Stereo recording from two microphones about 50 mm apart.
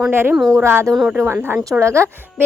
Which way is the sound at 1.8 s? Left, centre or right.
Right.